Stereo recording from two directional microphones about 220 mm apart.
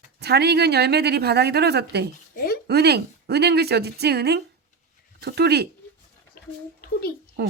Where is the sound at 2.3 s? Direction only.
40° left (ahead or behind).